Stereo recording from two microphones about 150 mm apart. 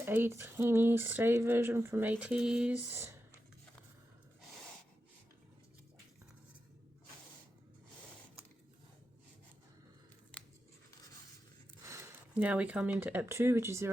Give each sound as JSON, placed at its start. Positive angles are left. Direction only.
{"t": 0.0, "sound": "speech", "side_deg": -15}
{"t": 10.3, "sound": "scissors", "side_deg": 10}
{"t": 11.9, "sound": "zipper", "side_deg": -20}
{"t": 12.3, "sound": "speech", "side_deg": -10}